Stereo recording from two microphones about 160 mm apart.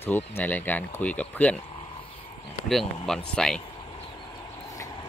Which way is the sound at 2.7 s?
Centre (ahead or behind).